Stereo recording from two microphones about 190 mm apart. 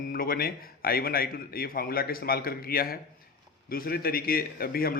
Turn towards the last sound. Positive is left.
turn(degrees=50)  # may be behind; listen again after turning